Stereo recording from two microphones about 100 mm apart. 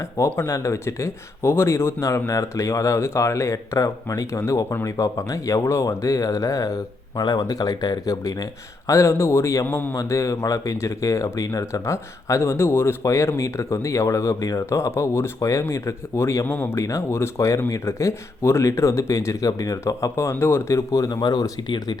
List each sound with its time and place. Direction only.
0.3 s speech: 30° left (ahead or behind)
9.6 s speech: 20° left (ahead or behind)
9.9 s speech: 30° left (ahead or behind)